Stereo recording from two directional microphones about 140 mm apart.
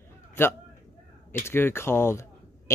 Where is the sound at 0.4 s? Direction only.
15° left (ahead or behind).